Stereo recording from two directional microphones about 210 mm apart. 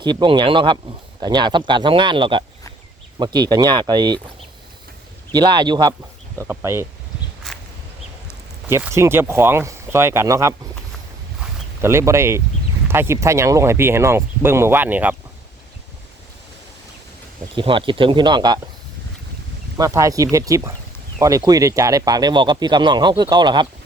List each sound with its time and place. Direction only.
0.0 s speech: 20° right (ahead or behind)
5.3 s speech: 20° right (ahead or behind)
7.5 s a sound: centre (ahead or behind)
8.6 s speech: 10° right (ahead or behind)
11.3 s a sound: 10° right (ahead or behind)
12.9 s speech: 10° right (ahead or behind)
17.5 s speech: 25° right (ahead or behind)
19.7 s speech: 15° right (ahead or behind)